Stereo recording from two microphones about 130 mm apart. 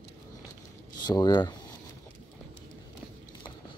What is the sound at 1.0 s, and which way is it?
Speech, 30° left (ahead or behind).